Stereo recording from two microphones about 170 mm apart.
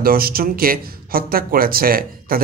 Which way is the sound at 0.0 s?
60° right (ahead or behind).